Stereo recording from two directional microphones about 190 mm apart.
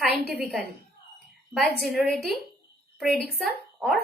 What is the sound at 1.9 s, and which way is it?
A woman's voice, centre (ahead or behind).